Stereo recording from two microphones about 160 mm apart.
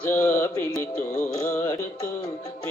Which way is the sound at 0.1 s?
20° left (ahead or behind).